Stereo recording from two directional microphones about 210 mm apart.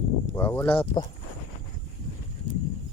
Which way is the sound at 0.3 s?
10° left (ahead or behind).